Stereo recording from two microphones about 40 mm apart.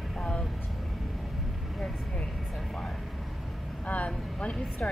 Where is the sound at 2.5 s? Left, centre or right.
Centre.